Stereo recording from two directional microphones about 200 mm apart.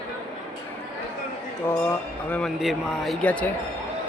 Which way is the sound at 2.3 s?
Centre (ahead or behind).